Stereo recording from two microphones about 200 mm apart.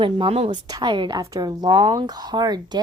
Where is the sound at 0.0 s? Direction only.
25° right (ahead or behind).